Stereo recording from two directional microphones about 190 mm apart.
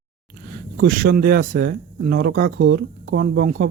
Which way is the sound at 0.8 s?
50° right (ahead or behind).